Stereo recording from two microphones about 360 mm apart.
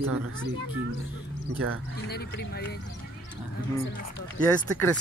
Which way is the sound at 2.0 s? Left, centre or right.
Left.